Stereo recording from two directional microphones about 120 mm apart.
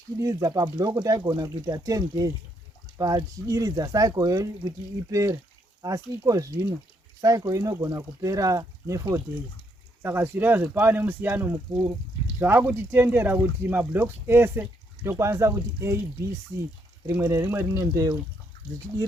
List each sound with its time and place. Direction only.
0.2 s speech: 30° right (ahead or behind)
17.1 s speech: 20° right (ahead or behind)